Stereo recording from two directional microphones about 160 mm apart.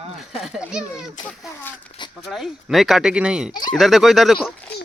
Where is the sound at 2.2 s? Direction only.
Centre (ahead or behind).